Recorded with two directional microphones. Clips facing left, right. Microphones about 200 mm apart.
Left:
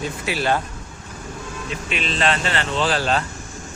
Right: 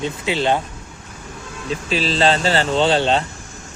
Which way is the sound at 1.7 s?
30° right (ahead or behind).